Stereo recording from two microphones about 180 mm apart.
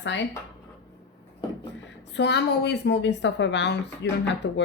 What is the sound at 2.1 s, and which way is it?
A woman's voice, 70° left (ahead or behind).